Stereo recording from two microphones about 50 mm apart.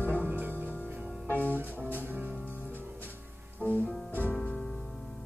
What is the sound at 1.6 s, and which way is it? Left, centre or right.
Music, right.